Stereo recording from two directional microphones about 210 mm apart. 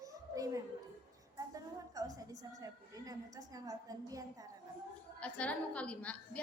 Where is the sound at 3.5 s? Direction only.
15° right (ahead or behind).